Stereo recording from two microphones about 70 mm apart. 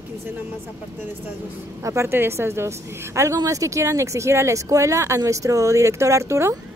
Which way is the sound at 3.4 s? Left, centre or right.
Right.